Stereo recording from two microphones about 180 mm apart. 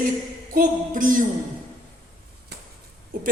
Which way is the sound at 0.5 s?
50° right (ahead or behind).